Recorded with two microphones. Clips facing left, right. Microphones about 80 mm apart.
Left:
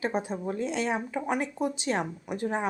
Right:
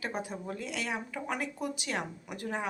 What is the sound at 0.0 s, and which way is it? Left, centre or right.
Speech, left.